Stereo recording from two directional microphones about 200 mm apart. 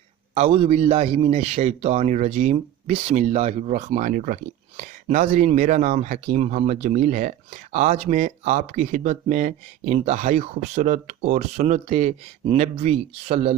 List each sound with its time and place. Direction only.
0.3 s speech: 30° right (ahead or behind)